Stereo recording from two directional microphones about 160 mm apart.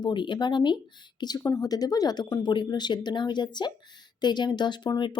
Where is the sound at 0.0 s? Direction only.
30° left (ahead or behind).